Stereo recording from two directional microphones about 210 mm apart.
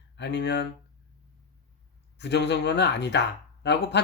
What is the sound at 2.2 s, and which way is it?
Speech, 55° left (ahead or behind).